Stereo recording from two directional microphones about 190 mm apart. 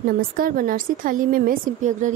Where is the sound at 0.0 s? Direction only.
50° right (ahead or behind).